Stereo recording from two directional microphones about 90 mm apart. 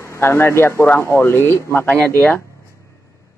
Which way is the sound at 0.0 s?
30° left (ahead or behind).